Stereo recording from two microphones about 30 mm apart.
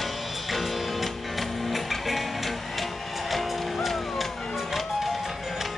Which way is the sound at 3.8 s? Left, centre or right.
Centre.